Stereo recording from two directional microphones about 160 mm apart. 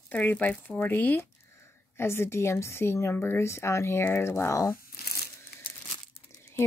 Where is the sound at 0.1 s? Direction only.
10° left (ahead or behind).